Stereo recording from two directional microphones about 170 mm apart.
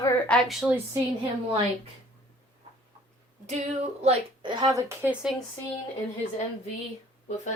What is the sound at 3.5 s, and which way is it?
Speech, 40° right (ahead or behind).